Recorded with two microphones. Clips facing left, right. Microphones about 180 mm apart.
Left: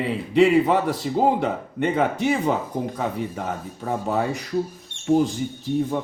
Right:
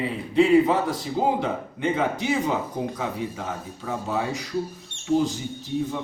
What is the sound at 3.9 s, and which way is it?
Speech, 55° left (ahead or behind).